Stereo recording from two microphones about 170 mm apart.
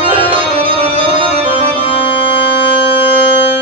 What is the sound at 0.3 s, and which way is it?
Music, 30° right (ahead or behind).